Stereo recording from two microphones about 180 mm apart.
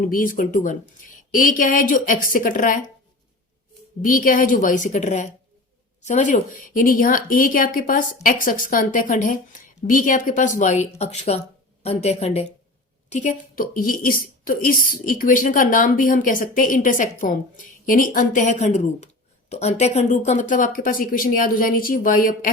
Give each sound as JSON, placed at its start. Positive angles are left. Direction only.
{"t": 0.0, "sound": "speech", "side_deg": 50}
{"t": 4.0, "sound": "a woman's voice", "side_deg": 50}